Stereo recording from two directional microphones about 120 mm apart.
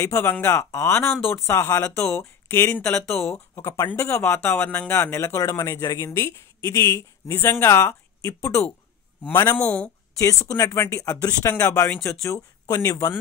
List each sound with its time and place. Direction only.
0.0 s speech: 20° left (ahead or behind)
10.1 s speech: 25° left (ahead or behind)